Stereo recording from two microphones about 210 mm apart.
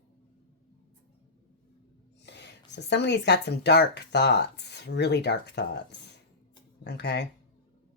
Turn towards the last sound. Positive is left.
turn(degrees=55)  # may be behind; listen again after turning